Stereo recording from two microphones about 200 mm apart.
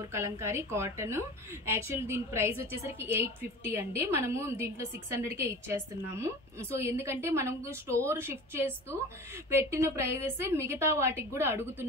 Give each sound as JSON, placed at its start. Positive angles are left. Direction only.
{"t": 0.1, "sound": "a woman's voice", "side_deg": -15}